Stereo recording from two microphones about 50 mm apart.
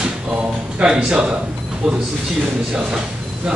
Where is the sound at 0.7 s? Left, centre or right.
Centre.